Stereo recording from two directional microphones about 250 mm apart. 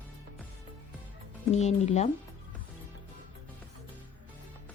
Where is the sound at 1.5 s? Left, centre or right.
Left.